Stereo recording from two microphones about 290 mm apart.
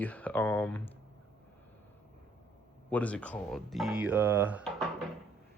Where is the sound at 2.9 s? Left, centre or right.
Centre.